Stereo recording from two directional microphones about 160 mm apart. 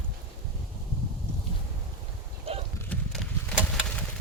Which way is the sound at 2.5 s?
40° right (ahead or behind).